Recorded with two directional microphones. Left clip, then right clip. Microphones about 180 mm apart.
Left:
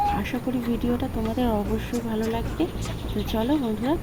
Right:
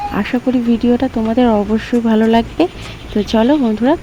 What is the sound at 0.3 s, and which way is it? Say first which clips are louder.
Speech: right 12 dB; 45° right (ahead or behind).